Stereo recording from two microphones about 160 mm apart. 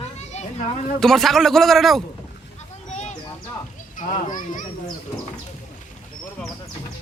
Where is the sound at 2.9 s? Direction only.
45° left (ahead or behind).